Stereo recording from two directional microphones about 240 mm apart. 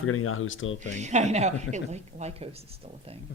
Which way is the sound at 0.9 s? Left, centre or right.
Right.